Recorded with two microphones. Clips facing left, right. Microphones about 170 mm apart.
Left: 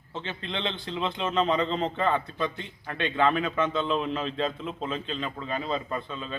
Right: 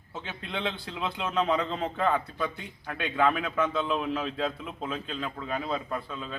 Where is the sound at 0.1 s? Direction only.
5° right (ahead or behind).